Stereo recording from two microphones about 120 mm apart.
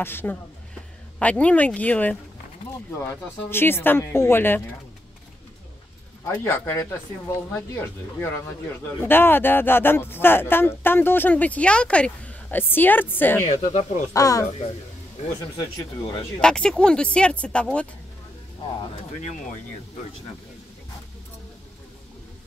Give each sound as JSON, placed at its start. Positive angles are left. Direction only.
{"t": 0.0, "sound": "speech", "side_deg": 20}
{"t": 3.3, "sound": "speech", "side_deg": 20}
{"t": 6.2, "sound": "speech", "side_deg": 20}
{"t": 13.5, "sound": "speech", "side_deg": 70}
{"t": 14.1, "sound": "speech", "side_deg": 30}
{"t": 16.3, "sound": "speech", "side_deg": 5}